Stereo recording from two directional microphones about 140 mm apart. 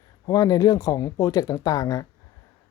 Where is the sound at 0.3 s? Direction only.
25° left (ahead or behind).